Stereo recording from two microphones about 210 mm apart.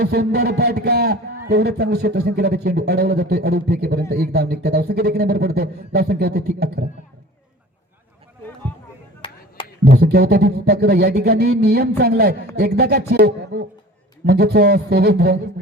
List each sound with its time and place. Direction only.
0.0 s a man's voice: 50° right (ahead or behind)
9.2 s a sound: 25° left (ahead or behind)
9.8 s a man's voice: 50° right (ahead or behind)